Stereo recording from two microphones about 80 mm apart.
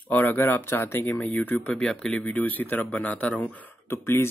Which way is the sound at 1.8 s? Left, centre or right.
Centre.